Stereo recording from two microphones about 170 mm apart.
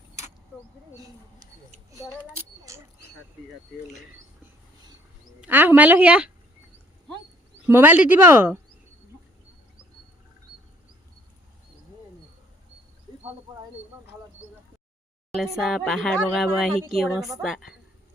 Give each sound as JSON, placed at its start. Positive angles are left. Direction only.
{"t": 1.9, "sound": "a sound", "side_deg": -15}
{"t": 5.4, "sound": "a woman's voice", "side_deg": -10}
{"t": 7.7, "sound": "a woman's voice", "side_deg": -10}
{"t": 15.3, "sound": "speech", "side_deg": 0}